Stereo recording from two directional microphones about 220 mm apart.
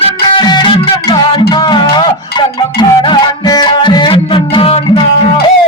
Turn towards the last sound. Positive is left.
turn(degrees=25)  # may be behind; listen again after turning